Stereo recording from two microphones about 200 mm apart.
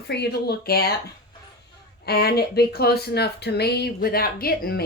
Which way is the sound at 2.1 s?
50° left (ahead or behind).